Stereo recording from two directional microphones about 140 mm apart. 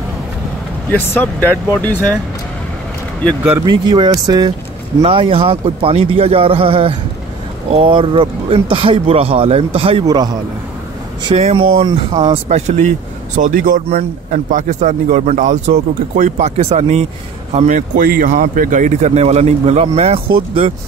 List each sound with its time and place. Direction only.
1.2 s speech: 15° left (ahead or behind)
3.6 s speech: 30° right (ahead or behind)
10.0 s speech: 30° right (ahead or behind)
11.3 s speech: 50° right (ahead or behind)
13.4 s speech: 75° right (ahead or behind); by 17.0 s 50° right (ahead or behind)
17.6 s speech: 60° right (ahead or behind); by 20.7 s 40° right (ahead or behind)